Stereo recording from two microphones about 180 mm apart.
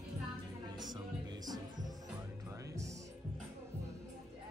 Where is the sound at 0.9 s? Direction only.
20° right (ahead or behind).